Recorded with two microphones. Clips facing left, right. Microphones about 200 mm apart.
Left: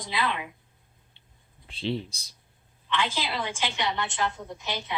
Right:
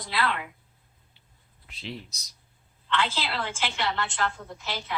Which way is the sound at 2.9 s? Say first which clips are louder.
Even; 15° left (ahead or behind).